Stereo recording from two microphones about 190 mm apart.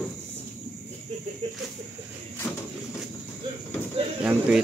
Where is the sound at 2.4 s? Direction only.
5° left (ahead or behind).